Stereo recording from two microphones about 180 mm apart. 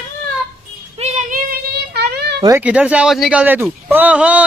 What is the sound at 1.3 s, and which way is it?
Child singing, 60° right (ahead or behind).